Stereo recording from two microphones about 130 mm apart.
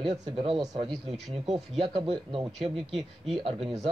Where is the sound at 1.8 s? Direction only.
40° right (ahead or behind).